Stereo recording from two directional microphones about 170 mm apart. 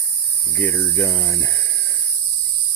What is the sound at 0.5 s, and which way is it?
Speech, 10° left (ahead or behind).